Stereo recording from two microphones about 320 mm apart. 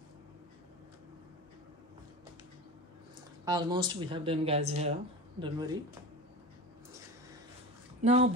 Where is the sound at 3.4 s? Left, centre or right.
Centre.